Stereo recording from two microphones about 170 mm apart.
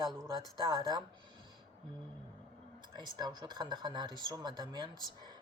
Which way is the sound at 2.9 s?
25° right (ahead or behind).